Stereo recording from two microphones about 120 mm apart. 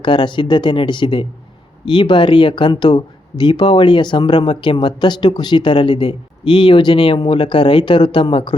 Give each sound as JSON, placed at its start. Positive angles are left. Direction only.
{"t": 0.0, "sound": "speech", "side_deg": 40}